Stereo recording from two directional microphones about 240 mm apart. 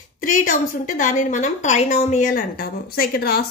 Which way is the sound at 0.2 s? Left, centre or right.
Left.